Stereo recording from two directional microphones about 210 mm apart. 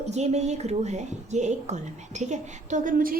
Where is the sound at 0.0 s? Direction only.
30° right (ahead or behind).